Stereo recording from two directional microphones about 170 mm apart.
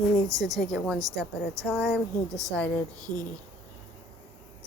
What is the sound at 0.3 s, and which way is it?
Speech, 20° right (ahead or behind).